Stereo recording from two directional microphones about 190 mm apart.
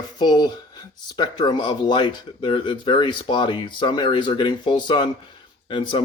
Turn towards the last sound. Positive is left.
turn(degrees=25)  # may be behind; listen again after turning